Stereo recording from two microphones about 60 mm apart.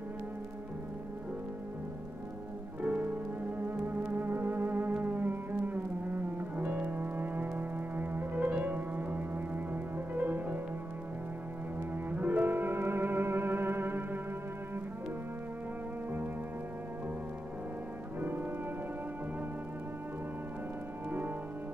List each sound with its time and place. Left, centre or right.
2.8 s music: right
12.1 s music: right
18.2 s music: right